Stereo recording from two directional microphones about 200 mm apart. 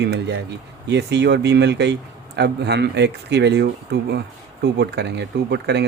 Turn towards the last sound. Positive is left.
turn(degrees=-55)  # may be behind; listen again after turning